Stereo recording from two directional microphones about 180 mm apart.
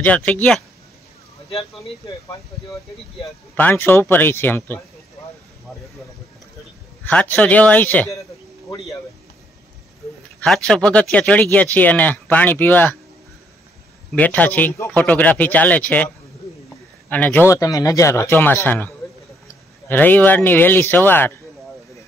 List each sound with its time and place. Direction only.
0.0 s speech: 10° left (ahead or behind)
3.5 s speech: 10° left (ahead or behind)
7.1 s speech: 10° left (ahead or behind)
10.4 s speech: 5° left (ahead or behind)
14.1 s speech: 10° left (ahead or behind)